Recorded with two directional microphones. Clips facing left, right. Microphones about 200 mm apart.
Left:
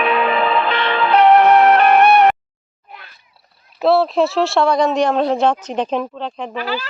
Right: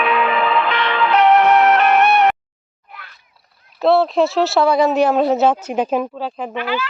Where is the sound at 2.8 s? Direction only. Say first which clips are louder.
Left 1 dB; 25° left (ahead or behind).